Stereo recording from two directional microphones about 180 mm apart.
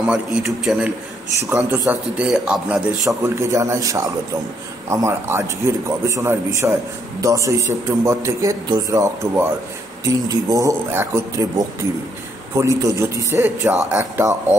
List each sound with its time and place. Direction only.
0.0 s speech: 5° right (ahead or behind)
3.1 s a man's voice: 15° right (ahead or behind)